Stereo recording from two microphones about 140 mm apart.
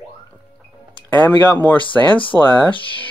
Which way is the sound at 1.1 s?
15° left (ahead or behind).